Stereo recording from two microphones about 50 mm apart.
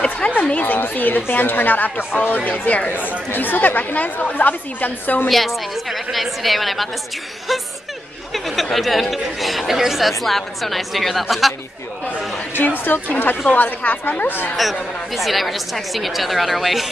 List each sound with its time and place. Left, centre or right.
0.3 s a woman's voice: left
3.3 s a woman's voice: left
5.3 s speech: centre
8.3 s speech: centre
12.5 s a woman's voice: left
14.6 s speech: centre